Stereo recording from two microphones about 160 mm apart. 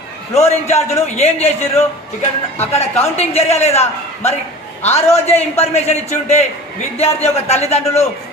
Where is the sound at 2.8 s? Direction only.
40° left (ahead or behind).